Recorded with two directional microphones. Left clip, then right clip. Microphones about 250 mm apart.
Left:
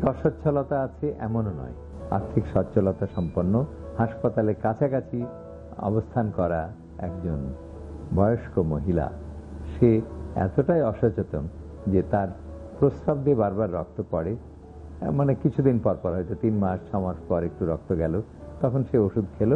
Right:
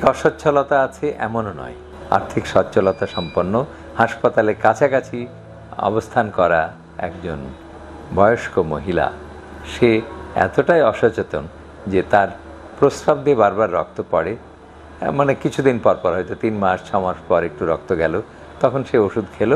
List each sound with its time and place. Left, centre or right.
0.0 s speech: centre